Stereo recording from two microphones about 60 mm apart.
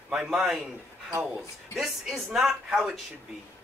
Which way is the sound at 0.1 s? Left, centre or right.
Centre.